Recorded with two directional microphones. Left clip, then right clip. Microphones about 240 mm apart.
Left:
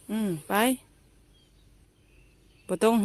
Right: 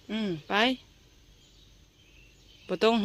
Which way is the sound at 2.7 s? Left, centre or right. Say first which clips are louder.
Left 1 dB; centre.